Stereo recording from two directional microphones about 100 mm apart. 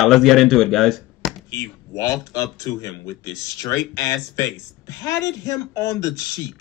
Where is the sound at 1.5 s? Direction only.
30° left (ahead or behind).